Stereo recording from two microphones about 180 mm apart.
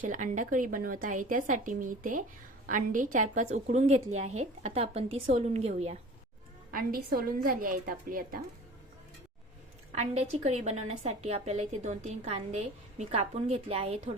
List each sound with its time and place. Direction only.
0.0 s a woman's voice: 45° right (ahead or behind)
6.7 s speech: 55° right (ahead or behind)
9.9 s a woman's voice: 35° right (ahead or behind)